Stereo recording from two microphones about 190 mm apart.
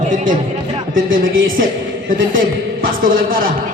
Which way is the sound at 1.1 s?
90° right.